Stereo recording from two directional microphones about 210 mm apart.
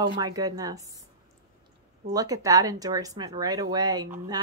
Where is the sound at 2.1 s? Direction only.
15° right (ahead or behind).